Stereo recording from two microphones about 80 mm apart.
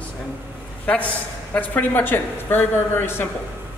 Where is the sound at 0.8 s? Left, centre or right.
Centre.